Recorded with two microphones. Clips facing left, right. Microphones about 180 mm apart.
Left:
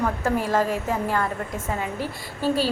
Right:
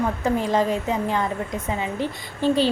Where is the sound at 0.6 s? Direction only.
5° left (ahead or behind).